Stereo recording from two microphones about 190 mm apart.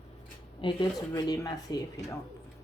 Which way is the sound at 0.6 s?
25° left (ahead or behind).